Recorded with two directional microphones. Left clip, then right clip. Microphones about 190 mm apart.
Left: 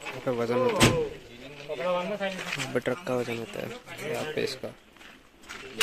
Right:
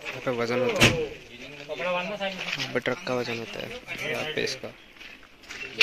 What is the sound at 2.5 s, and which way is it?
Speech, 15° left (ahead or behind).